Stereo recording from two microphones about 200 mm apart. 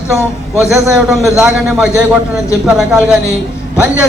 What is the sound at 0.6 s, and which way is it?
A man's voice, centre (ahead or behind).